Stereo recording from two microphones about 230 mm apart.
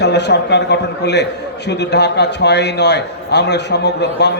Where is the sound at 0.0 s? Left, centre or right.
Left.